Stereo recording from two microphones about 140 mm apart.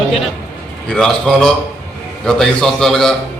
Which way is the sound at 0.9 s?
5° left (ahead or behind).